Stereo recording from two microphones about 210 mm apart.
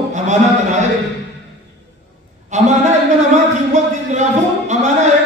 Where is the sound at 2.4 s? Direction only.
35° right (ahead or behind).